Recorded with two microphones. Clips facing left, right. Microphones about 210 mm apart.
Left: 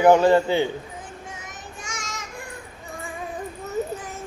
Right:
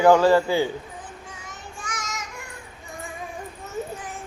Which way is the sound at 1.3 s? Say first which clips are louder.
Left 2 dB; 25° left (ahead or behind).